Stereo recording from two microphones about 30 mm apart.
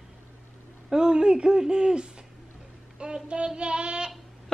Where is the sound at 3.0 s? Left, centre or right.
Right.